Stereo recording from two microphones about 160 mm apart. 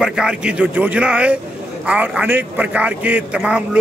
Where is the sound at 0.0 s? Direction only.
5° right (ahead or behind).